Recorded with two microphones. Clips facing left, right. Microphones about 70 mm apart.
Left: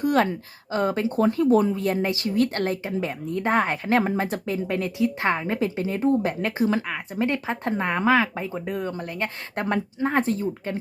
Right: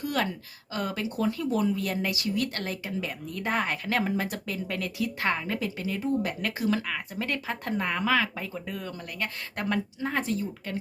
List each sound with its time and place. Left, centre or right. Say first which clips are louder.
0.0 s speech: left 8 dB; left